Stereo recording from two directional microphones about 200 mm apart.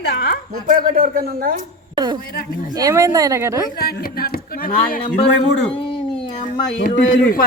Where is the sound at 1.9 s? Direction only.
20° right (ahead or behind).